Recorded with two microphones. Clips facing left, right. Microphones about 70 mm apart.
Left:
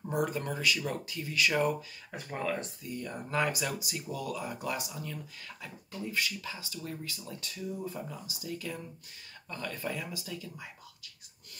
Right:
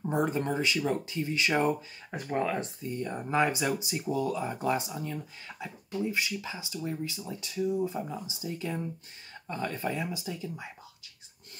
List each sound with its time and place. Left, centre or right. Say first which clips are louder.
0.1 s speech: right 3 dB; right